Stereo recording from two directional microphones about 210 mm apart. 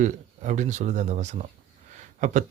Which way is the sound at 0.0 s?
35° right (ahead or behind).